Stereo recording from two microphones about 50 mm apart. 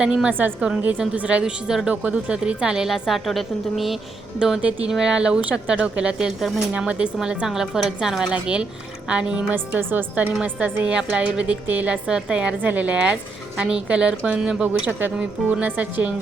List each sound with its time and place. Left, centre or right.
0.0 s a woman's voice: centre
0.3 s a woman's voice: right
1.1 s speech: right
2.8 s a woman's voice: centre
4.4 s a woman's voice: centre
7.4 s a woman's voice: centre
8.3 s speech: right
9.5 s a woman's voice: right
12.0 s speech: centre
12.6 s a woman's voice: right
14.8 s speech: right
15.2 s speech: right
15.6 s a woman's voice: right